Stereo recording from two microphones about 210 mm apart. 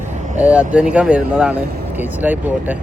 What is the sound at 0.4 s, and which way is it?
Speech, 5° right (ahead or behind).